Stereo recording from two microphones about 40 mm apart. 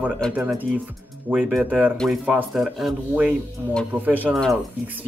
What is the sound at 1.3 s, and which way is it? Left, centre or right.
Speech, right.